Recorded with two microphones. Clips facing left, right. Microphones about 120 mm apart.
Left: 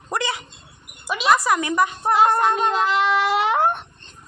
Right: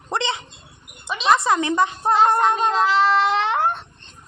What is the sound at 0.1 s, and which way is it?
Dog, 25° right (ahead or behind).